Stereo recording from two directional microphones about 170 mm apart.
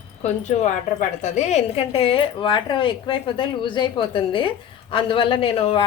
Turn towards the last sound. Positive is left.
turn(degrees=30)  # may be behind; listen again after turning